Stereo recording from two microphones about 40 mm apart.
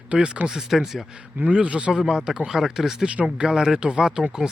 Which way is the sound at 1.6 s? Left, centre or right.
Right.